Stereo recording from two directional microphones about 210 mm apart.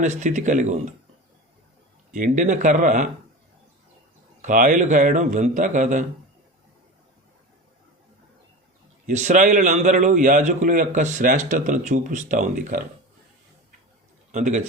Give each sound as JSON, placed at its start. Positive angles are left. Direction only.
{"t": 0.0, "sound": "a man's voice", "side_deg": -35}
{"t": 2.1, "sound": "a man's voice", "side_deg": -40}
{"t": 4.4, "sound": "a man's voice", "side_deg": -40}
{"t": 9.0, "sound": "a man's voice", "side_deg": -35}
{"t": 14.3, "sound": "a man's voice", "side_deg": -35}